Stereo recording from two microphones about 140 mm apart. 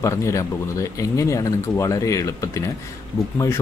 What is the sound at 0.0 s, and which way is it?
Speech, 20° left (ahead or behind).